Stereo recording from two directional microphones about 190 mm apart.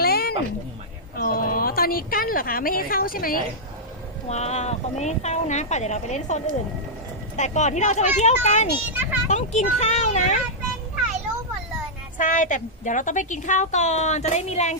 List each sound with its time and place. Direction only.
0.0 s cat: 55° left (ahead or behind)
1.1 s a woman's voice: 50° left (ahead or behind)
4.3 s a woman's voice: 35° left (ahead or behind)
8.9 s a child's voice: 10° right (ahead or behind)
9.3 s a woman's voice: 35° left (ahead or behind)
12.1 s a woman's voice: 45° left (ahead or behind)